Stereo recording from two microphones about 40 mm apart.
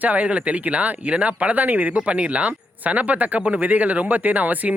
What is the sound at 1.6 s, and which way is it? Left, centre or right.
Speech, right.